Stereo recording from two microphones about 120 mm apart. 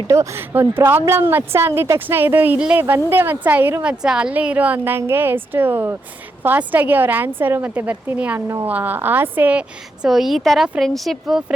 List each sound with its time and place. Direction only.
0.1 s a woman's voice: 20° right (ahead or behind); by 11.4 s centre (ahead or behind)